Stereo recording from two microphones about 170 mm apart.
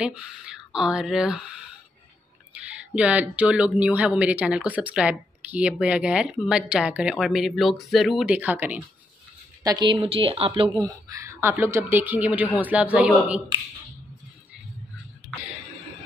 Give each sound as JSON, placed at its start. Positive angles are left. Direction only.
{"t": 0.0, "sound": "speech", "side_deg": -5}
{"t": 2.5, "sound": "speech", "side_deg": -10}
{"t": 9.6, "sound": "speech", "side_deg": -25}